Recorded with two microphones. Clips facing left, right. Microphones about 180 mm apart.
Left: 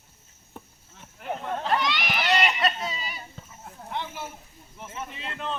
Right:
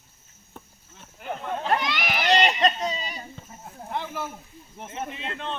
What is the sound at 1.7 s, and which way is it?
Run, 50° right (ahead or behind).